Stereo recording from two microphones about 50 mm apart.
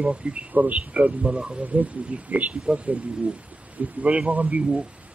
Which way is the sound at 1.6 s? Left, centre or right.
Right.